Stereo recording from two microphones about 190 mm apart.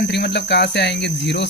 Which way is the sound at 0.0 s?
65° left (ahead or behind).